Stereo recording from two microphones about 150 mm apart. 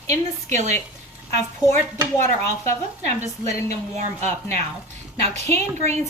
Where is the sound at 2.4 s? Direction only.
50° right (ahead or behind).